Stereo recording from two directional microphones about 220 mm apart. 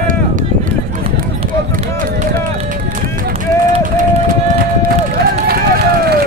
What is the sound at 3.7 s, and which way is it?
Run, 35° right (ahead or behind).